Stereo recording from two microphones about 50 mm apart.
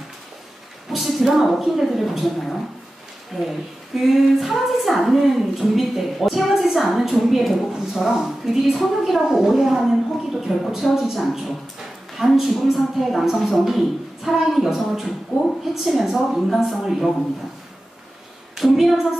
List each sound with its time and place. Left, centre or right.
0.8 s a woman's voice: centre
18.6 s a woman's voice: centre